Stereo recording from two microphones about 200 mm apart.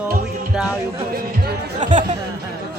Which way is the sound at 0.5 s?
5° right (ahead or behind).